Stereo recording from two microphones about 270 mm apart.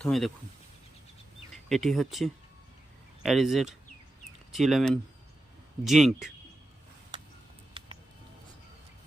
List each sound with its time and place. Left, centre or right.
0.0 s speech: centre
1.7 s speech: centre
7.8 s a sound: centre